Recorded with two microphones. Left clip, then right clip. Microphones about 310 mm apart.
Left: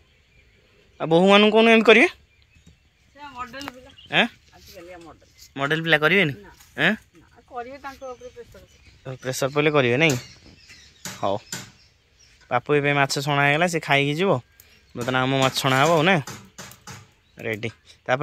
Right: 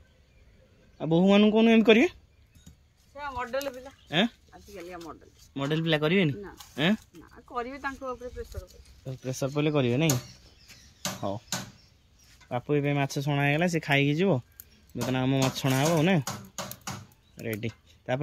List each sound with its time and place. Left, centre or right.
1.1 s speech: centre
3.2 s a sound: centre
5.5 s speech: centre
6.7 s a sound: centre
7.5 s speech: centre
9.0 s speech: left
11.1 s speech: left
12.4 s speech: left
12.9 s speech: centre
17.8 s a sound: centre